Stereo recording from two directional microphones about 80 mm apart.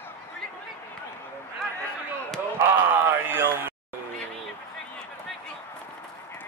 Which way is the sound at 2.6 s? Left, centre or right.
Right.